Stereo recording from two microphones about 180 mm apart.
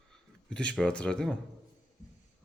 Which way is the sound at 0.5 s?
5° left (ahead or behind).